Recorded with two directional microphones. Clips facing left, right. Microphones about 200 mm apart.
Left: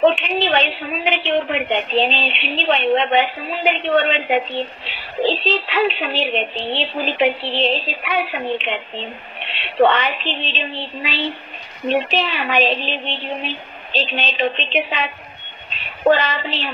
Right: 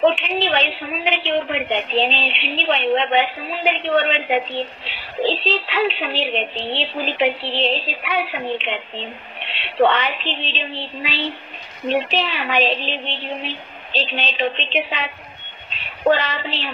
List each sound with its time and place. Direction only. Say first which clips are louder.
0.0 s a woman's voice: left 2 dB; 50° left (ahead or behind)